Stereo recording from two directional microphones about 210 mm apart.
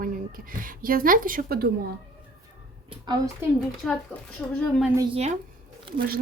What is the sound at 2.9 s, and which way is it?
Speech, 20° right (ahead or behind).